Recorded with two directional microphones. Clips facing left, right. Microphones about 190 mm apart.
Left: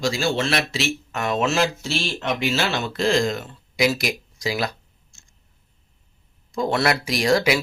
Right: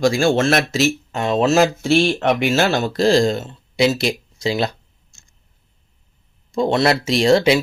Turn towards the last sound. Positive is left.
turn(degrees=-25)  # may be behind; listen again after turning